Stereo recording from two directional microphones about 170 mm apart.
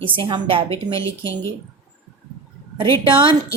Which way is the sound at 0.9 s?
15° left (ahead or behind).